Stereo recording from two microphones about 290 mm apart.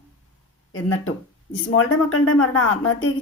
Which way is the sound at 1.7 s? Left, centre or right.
Left.